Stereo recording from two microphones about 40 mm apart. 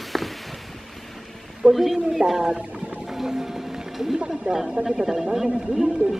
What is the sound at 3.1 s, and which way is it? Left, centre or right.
Vehicle, centre.